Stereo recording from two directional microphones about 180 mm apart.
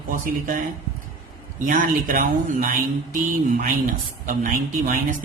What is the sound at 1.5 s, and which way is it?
A man's voice, 50° right (ahead or behind).